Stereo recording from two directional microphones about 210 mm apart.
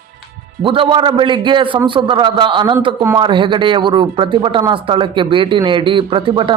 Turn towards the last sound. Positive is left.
turn(degrees=-25)  # may be behind; listen again after turning